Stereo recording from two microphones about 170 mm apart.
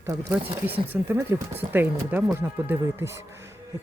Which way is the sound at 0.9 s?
15° right (ahead or behind).